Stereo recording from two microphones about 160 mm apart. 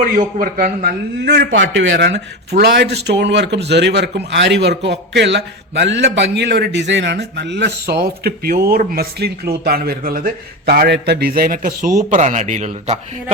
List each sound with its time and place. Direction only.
0.3 s a man's voice: 60° right (ahead or behind); by 13.3 s 45° right (ahead or behind)